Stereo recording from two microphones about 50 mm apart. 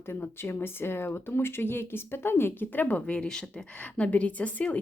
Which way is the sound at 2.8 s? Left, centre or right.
Left.